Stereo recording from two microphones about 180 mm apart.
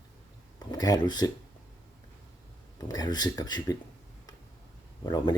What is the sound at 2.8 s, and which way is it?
Speech, 20° left (ahead or behind).